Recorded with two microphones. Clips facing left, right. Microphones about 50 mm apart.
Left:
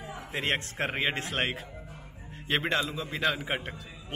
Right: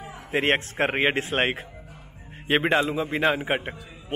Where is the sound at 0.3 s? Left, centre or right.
Right.